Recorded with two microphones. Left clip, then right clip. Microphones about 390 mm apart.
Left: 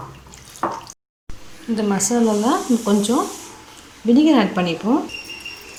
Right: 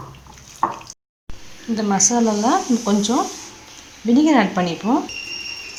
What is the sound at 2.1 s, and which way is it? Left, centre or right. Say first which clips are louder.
Speech: even; centre.